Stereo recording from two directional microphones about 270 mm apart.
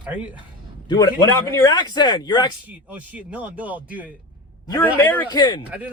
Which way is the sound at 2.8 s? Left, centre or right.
Centre.